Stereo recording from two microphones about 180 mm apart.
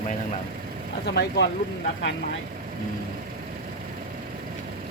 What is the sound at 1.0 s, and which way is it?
Speech, 70° left (ahead or behind).